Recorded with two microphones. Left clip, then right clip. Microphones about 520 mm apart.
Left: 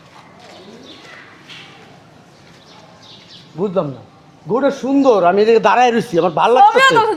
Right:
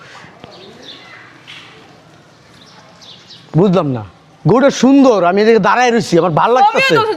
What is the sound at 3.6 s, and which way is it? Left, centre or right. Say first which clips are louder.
Speech: right 5 dB; right.